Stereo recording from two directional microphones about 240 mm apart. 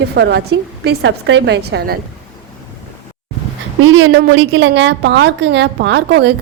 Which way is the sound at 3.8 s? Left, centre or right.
Right.